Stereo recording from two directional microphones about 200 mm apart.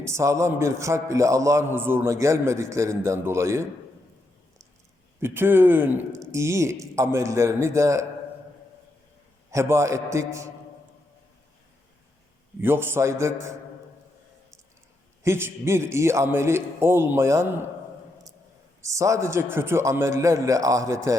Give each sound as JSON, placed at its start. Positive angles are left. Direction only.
{"t": 0.0, "sound": "a man's voice", "side_deg": -15}
{"t": 5.2, "sound": "a man's voice", "side_deg": -10}
{"t": 9.5, "sound": "a man's voice", "side_deg": -15}
{"t": 12.6, "sound": "a man's voice", "side_deg": -10}
{"t": 15.2, "sound": "a man's voice", "side_deg": -10}
{"t": 18.8, "sound": "a man's voice", "side_deg": -15}